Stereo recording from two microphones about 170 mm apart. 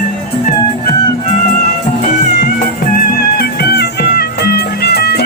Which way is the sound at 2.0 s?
50° left (ahead or behind).